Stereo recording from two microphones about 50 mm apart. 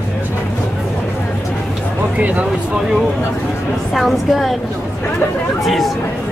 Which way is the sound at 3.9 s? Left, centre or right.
Centre.